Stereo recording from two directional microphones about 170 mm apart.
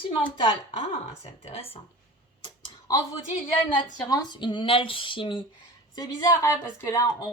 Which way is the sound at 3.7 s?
25° left (ahead or behind).